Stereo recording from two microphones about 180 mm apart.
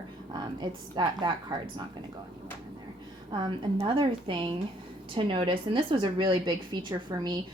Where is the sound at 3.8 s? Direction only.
30° right (ahead or behind).